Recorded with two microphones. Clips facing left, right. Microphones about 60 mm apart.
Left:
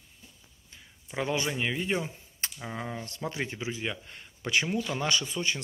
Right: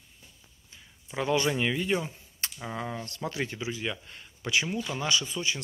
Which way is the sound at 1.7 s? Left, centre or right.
Left.